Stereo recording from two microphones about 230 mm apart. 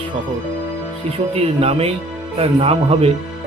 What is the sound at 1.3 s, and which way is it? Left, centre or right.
Speech, right.